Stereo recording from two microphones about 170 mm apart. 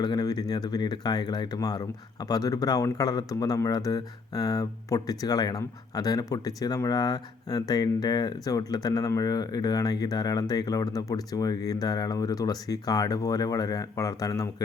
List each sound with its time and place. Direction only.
0.0 s speech: 25° left (ahead or behind)